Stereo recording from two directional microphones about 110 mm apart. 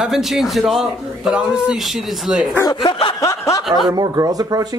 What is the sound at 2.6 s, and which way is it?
Snicker, 45° left (ahead or behind).